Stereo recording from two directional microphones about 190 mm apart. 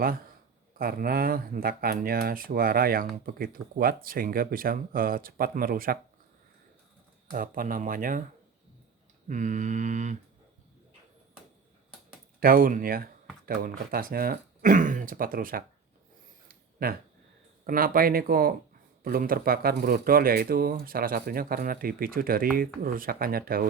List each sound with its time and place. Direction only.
0.8 s speech: 50° right (ahead or behind)
7.3 s speech: 45° right (ahead or behind)
9.2 s mantra: 40° right (ahead or behind)
12.4 s speech: 50° right (ahead or behind)
16.5 s a sound: 50° right (ahead or behind)
17.7 s speech: 50° right (ahead or behind)